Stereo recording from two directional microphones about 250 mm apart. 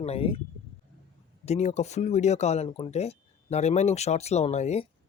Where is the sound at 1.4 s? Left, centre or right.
Left.